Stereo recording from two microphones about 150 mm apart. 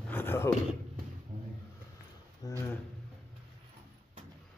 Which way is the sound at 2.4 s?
20° left (ahead or behind).